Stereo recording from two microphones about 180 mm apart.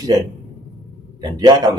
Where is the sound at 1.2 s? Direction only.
20° right (ahead or behind).